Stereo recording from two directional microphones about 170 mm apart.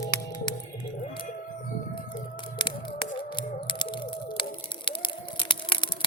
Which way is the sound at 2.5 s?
30° left (ahead or behind).